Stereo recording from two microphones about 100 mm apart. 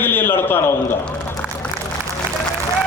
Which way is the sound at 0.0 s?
20° left (ahead or behind).